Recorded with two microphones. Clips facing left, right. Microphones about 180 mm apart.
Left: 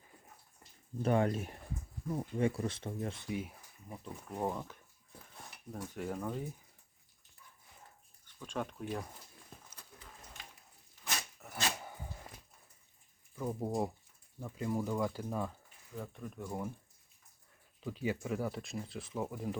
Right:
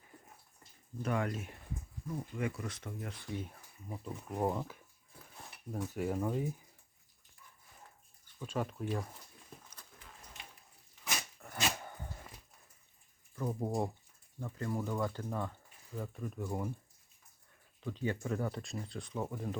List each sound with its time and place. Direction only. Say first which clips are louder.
1.0 s speech: left 5 dB; 30° left (ahead or behind)
3.3 s speech: left 2 dB; 5° left (ahead or behind)
3.8 s speech: right 3 dB; 5° right (ahead or behind)
8.4 s speech: right 2 dB; 5° right (ahead or behind)
11.3 s dog: right 1 dB; 5° left (ahead or behind)
13.3 s speech: even; 5° left (ahead or behind)
14.3 s speech: left 2 dB; 10° left (ahead or behind)
16.0 s speech: right 3 dB; 5° right (ahead or behind)
17.8 s speech: even; 10° left (ahead or behind)